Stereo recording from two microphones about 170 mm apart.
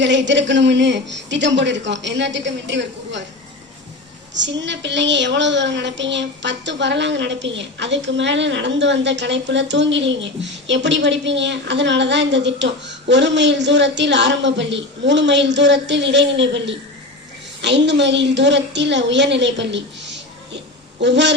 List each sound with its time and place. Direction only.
0.0 s a woman's voice: 90° right
4.4 s a woman's voice: 90° right